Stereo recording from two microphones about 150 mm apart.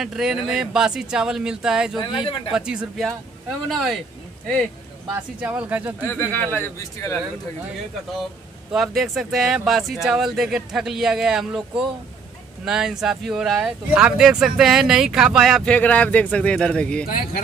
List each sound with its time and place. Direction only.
0.0 s speech: 5° right (ahead or behind)
2.0 s speech: 35° left (ahead or behind)
2.5 s speech: 5° right (ahead or behind)
5.4 s speech: 10° right (ahead or behind)
6.0 s a man's voice: 15° left (ahead or behind)
8.7 s speech: centre (ahead or behind)
17.0 s speech: 80° left